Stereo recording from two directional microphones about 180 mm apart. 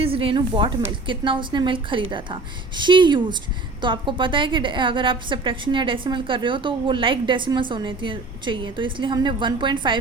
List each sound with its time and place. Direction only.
0.0 s a woman's voice: 30° right (ahead or behind)